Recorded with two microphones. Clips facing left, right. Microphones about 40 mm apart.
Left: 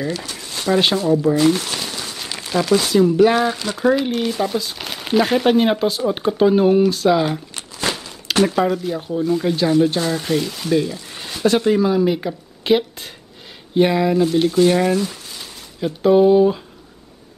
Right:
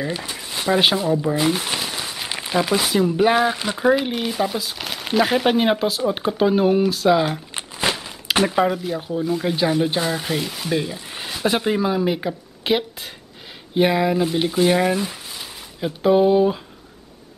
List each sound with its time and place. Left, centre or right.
0.0 s speech: centre
7.5 s crumpling: right
8.0 s speech: centre